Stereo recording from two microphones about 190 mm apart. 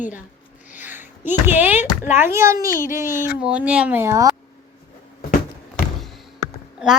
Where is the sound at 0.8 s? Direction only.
10° right (ahead or behind).